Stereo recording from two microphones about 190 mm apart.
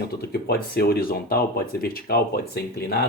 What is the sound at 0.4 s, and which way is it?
Speech, 55° left (ahead or behind).